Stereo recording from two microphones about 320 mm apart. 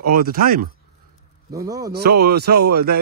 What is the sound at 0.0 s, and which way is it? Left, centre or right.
Speech, right.